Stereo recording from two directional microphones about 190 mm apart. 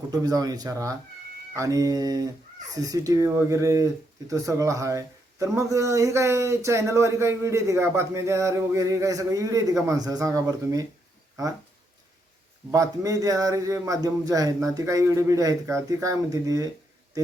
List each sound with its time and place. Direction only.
0.1 s speech: 20° right (ahead or behind)
12.7 s speech: 15° right (ahead or behind)